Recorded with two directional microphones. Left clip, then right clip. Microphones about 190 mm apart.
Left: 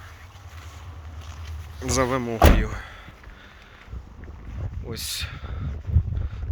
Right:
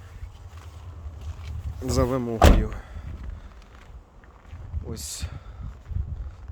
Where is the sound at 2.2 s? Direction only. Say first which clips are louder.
Left 1 dB; 35° right (ahead or behind).